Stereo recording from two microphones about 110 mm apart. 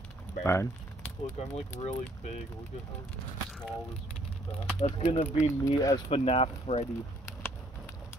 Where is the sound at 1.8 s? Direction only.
90° left.